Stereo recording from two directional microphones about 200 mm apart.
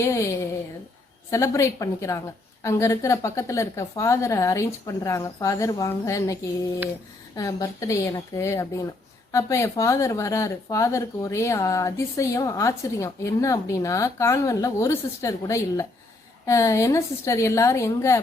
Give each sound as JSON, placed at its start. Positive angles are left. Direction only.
{"t": 0.0, "sound": "a woman's voice", "side_deg": 15}